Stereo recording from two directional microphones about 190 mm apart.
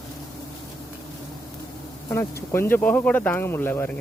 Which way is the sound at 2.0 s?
15° left (ahead or behind).